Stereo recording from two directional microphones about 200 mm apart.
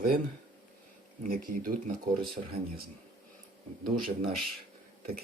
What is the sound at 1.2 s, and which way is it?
Speech, 45° right (ahead or behind).